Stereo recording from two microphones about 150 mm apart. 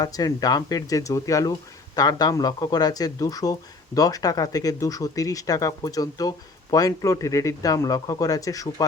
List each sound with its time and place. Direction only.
0.0 s a man's voice: 25° left (ahead or behind)